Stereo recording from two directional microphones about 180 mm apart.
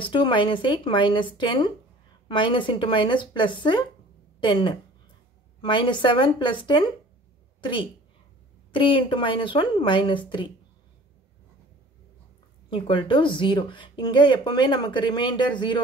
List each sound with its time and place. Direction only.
0.0 s speech: 25° left (ahead or behind)
8.7 s speech: 30° left (ahead or behind)
12.6 s speech: 25° left (ahead or behind)